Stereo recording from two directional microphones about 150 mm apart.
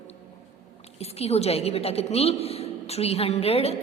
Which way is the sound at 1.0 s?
45° left (ahead or behind).